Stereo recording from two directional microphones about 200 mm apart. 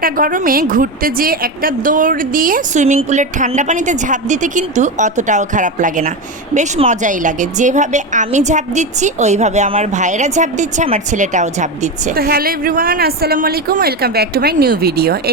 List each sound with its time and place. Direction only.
0.0 s a woman's voice: 45° right (ahead or behind)